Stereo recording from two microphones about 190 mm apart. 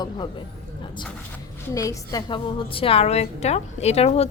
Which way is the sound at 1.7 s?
15° left (ahead or behind).